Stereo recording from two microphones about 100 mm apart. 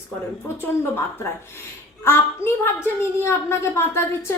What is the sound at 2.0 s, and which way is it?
A woman's voice, 25° left (ahead or behind).